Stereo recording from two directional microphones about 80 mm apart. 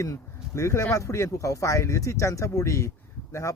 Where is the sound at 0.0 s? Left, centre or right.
Left.